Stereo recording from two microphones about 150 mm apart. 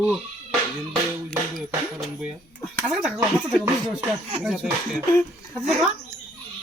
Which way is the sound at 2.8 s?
10° right (ahead or behind).